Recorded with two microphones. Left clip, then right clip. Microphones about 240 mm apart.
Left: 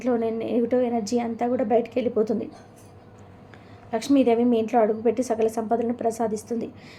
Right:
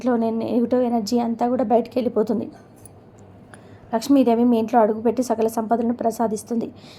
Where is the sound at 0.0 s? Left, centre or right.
Centre.